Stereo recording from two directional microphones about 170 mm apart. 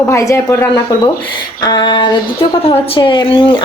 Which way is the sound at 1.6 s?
25° left (ahead or behind).